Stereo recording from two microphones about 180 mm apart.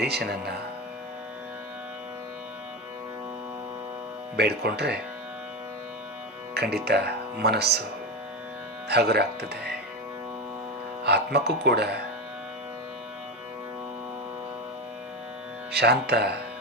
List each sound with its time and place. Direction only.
0.0 s speech: 65° right (ahead or behind)
4.4 s speech: 65° right (ahead or behind)
6.5 s speech: 65° right (ahead or behind)
8.9 s speech: 65° right (ahead or behind)
11.0 s speech: 65° right (ahead or behind)
15.7 s speech: 65° right (ahead or behind)